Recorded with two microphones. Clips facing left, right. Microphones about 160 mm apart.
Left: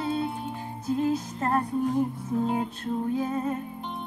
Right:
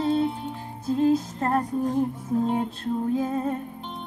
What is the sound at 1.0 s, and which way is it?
Music, 35° right (ahead or behind).